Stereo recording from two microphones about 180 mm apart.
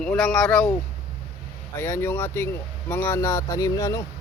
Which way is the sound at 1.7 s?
15° left (ahead or behind).